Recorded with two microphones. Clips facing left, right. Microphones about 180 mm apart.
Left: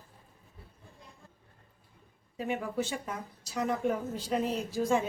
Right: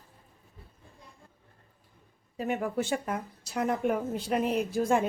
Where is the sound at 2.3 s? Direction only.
45° right (ahead or behind).